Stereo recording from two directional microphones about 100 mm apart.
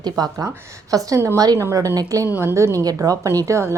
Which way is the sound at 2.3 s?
25° right (ahead or behind).